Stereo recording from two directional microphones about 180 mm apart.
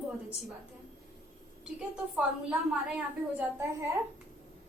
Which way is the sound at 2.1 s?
5° right (ahead or behind).